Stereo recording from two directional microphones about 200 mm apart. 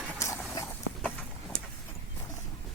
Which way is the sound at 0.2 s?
15° left (ahead or behind).